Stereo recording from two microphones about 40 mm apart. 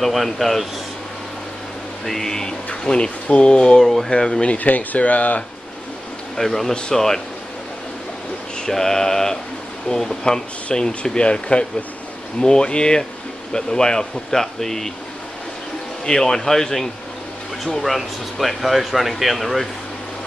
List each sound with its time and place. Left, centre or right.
0.0 s speech: centre
2.0 s speech: centre
2.7 s speech: left
3.8 s speech: centre
4.1 s speech: left
4.6 s speech: left
6.3 s speech: centre
8.6 s speech: centre
16.1 s speech: centre
17.8 s speech: centre